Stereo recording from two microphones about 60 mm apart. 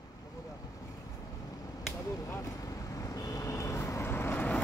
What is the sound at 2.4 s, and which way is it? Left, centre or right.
Vehicle, left.